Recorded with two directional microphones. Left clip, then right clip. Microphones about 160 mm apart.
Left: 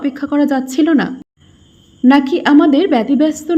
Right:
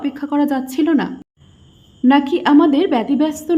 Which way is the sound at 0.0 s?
10° left (ahead or behind).